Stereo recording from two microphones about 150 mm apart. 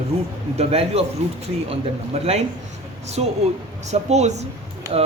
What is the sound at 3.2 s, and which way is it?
Speech, 45° right (ahead or behind).